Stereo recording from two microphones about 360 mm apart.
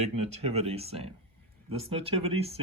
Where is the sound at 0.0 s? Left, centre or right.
Centre.